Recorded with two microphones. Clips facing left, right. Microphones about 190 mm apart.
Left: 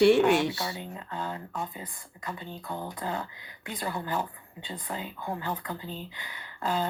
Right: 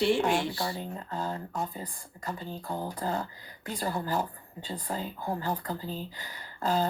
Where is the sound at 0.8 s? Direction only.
40° right (ahead or behind).